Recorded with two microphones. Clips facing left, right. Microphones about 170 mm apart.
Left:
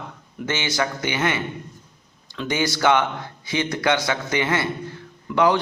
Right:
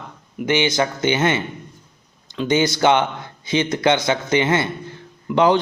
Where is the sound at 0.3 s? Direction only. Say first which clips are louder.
Right 6 dB; 15° right (ahead or behind).